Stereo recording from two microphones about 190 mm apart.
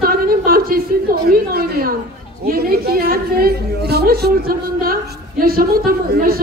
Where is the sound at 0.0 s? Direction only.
50° right (ahead or behind).